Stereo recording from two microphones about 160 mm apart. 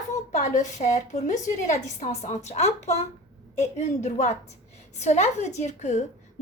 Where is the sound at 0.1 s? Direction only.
50° left (ahead or behind).